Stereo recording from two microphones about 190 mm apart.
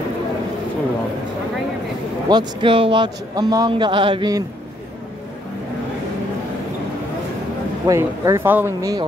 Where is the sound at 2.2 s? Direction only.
25° right (ahead or behind).